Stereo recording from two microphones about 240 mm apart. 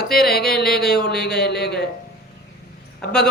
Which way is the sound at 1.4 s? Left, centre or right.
Left.